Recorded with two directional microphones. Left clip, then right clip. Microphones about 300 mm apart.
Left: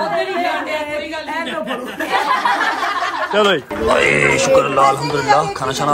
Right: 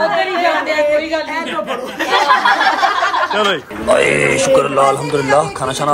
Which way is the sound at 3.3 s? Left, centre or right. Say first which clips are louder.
Left 1 dB; centre.